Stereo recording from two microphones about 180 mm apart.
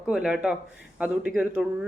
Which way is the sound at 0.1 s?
5° right (ahead or behind).